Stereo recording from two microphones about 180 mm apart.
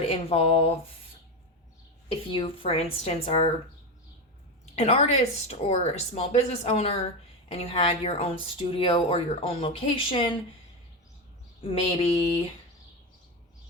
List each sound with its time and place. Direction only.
0.0 s speech: 35° left (ahead or behind)
2.3 s speech: 30° left (ahead or behind)
4.6 s speech: 35° left (ahead or behind)
11.6 s speech: 30° left (ahead or behind)